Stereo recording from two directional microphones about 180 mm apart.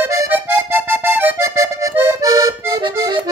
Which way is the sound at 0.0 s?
15° right (ahead or behind).